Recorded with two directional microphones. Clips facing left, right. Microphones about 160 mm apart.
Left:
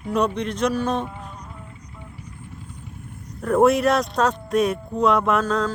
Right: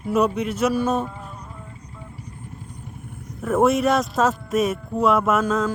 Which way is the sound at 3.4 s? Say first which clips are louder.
Left 1 dB; centre (ahead or behind).